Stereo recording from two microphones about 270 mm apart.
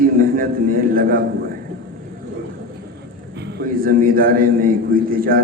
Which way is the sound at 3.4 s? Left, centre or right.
Right.